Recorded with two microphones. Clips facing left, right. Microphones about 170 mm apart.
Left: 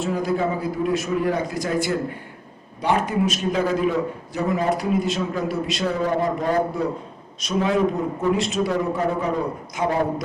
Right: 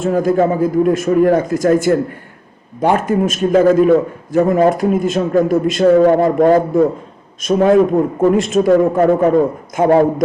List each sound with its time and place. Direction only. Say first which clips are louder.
0.0 s a man's voice: right 9 dB; 50° right (ahead or behind)